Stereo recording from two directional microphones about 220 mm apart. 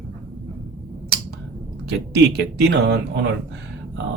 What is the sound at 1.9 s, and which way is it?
Speech, 50° right (ahead or behind).